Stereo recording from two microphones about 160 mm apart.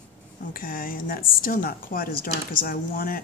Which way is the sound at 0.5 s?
60° left (ahead or behind).